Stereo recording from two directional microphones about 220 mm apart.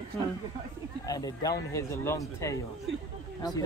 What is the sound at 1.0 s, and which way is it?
Speech, 15° left (ahead or behind).